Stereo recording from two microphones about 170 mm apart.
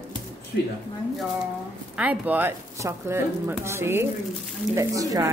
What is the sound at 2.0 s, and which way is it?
Speech, 10° right (ahead or behind).